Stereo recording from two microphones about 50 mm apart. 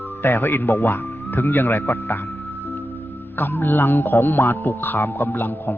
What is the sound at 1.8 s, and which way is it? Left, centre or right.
Speech, left.